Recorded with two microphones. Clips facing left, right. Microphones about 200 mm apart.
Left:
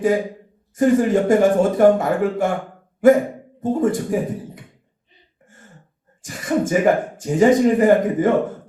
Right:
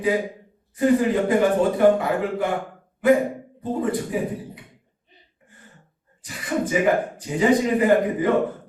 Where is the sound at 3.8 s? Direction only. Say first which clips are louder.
Left 4 dB; 45° left (ahead or behind).